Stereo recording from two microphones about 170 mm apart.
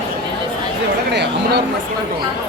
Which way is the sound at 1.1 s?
80° right.